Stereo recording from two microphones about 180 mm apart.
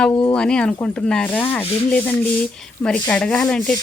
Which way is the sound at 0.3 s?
5° left (ahead or behind).